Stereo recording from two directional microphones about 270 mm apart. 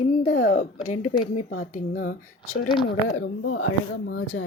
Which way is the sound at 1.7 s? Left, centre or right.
Left.